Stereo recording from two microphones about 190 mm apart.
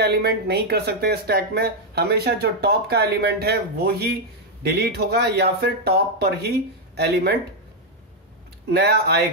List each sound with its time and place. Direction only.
0.0 s speech: 55° right (ahead or behind)
8.7 s speech: 60° right (ahead or behind)